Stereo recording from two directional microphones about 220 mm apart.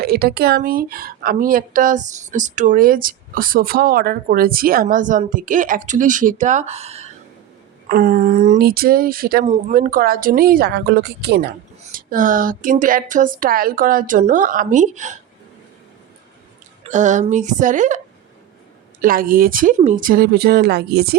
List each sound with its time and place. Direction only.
0.0 s speech: 45° right (ahead or behind); by 7.1 s 30° right (ahead or behind)
7.9 s speech: 40° right (ahead or behind)
16.8 s speech: 35° right (ahead or behind)